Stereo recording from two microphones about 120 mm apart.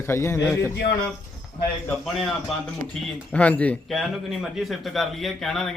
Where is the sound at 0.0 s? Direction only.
20° left (ahead or behind).